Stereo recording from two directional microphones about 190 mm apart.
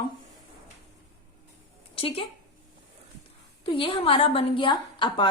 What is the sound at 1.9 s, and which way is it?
Speech, 30° left (ahead or behind).